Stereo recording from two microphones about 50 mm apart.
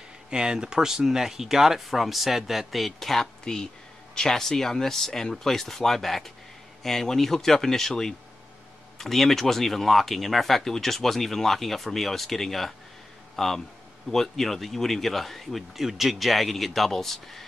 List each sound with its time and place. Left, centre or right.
0.3 s speech: centre